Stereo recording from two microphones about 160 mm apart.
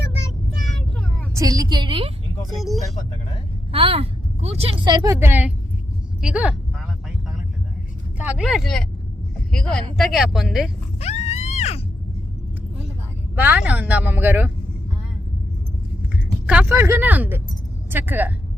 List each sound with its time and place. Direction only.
0.6 s vehicle: centre (ahead or behind)
1.3 s a woman's voice: 20° right (ahead or behind)
2.6 s speech: centre (ahead or behind)
3.7 s a woman's voice: 35° right (ahead or behind)
5.2 s a woman's voice: 10° right (ahead or behind)
6.2 s a sound: 5° right (ahead or behind)
8.2 s speech: 5° right (ahead or behind)
11.0 s a sound: 40° left (ahead or behind)
13.3 s a woman's voice: 10° right (ahead or behind)
16.5 s a woman's voice: 10° right (ahead or behind)